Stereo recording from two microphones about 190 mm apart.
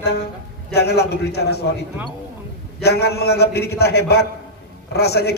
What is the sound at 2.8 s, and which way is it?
A man's voice, 60° left (ahead or behind).